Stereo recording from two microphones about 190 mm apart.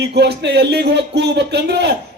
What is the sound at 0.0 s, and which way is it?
Speech, 60° right (ahead or behind).